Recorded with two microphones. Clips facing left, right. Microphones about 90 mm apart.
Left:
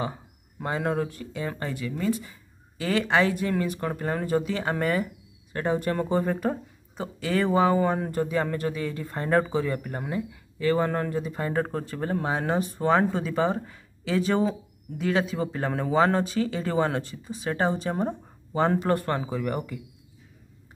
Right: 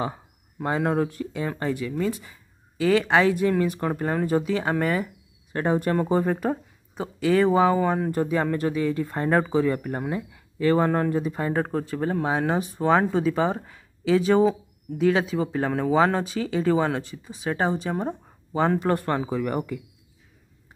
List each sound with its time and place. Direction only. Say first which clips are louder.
0.7 s speech: right 3 dB; 15° right (ahead or behind)
10.9 s speech: right 5 dB; 15° right (ahead or behind)